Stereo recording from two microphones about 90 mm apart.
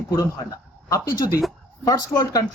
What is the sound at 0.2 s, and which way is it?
A man's voice, 40° left (ahead or behind).